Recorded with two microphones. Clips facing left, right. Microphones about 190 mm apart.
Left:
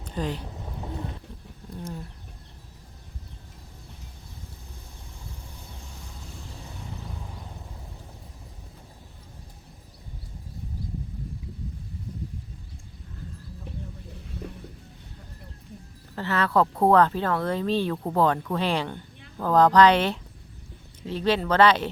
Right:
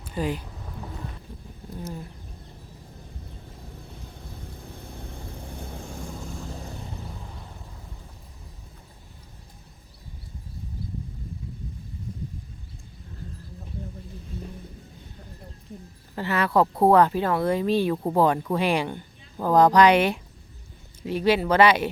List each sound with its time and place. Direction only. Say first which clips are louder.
0.0 s speech: right 2 dB; 10° right (ahead or behind)
1.7 s speech: right 1 dB; 5° right (ahead or behind)
4.6 s vehicle: right 8 dB; 60° right (ahead or behind)
16.1 s speech: right 1 dB; 10° right (ahead or behind)